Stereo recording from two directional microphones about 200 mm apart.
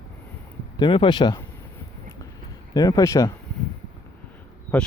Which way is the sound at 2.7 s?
20° left (ahead or behind).